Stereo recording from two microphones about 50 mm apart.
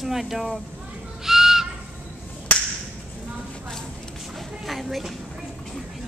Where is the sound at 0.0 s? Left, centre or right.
Centre.